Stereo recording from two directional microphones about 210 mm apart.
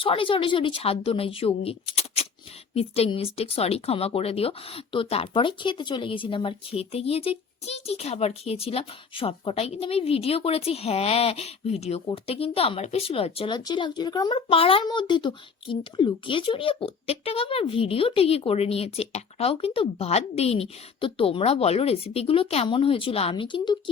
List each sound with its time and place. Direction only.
0.0 s speech: 25° left (ahead or behind)